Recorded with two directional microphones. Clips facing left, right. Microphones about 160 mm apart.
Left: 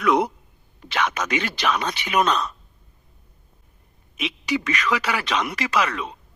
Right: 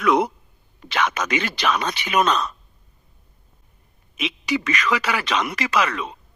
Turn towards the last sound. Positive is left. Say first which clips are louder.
# right 1 dB
turn(degrees=-90)